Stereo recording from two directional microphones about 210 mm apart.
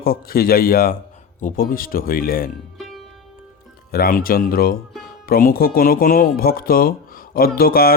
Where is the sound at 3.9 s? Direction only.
45° left (ahead or behind).